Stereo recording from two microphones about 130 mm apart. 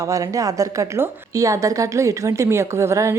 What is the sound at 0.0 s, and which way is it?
A woman's voice, 25° right (ahead or behind).